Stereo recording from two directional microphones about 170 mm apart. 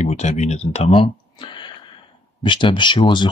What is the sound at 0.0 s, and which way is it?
Speech, 40° left (ahead or behind).